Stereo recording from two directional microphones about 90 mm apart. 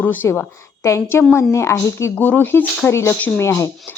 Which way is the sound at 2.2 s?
20° left (ahead or behind).